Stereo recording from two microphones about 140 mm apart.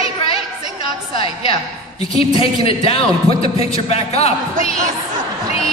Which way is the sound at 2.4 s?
40° left (ahead or behind).